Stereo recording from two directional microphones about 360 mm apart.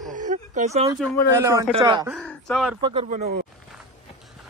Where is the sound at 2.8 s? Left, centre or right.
Centre.